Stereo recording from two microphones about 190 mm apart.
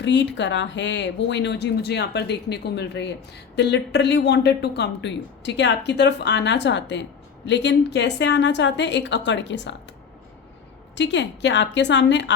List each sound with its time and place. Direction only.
0.0 s speech: 65° left (ahead or behind)
10.9 s speech: 70° left (ahead or behind)